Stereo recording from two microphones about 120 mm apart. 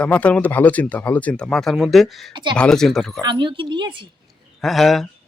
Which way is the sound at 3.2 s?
40° right (ahead or behind).